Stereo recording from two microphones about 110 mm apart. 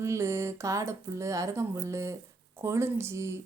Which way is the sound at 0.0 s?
25° right (ahead or behind).